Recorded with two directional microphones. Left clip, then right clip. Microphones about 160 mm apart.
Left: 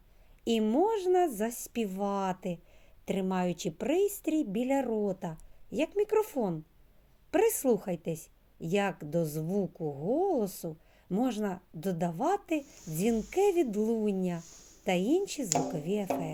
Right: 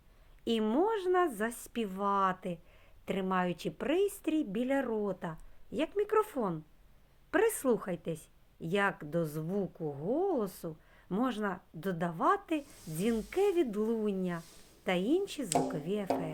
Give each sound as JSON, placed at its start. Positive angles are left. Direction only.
{"t": 0.4, "sound": "a woman's voice", "side_deg": 20}